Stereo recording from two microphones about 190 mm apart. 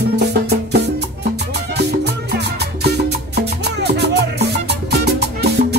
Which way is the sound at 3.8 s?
60° right (ahead or behind).